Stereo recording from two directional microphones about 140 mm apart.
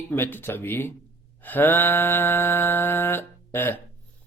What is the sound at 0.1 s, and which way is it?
Speech, 15° left (ahead or behind).